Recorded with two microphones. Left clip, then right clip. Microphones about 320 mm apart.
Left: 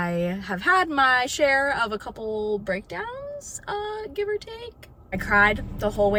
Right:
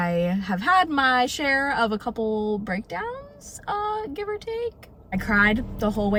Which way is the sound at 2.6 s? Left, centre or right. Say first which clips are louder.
Even; centre.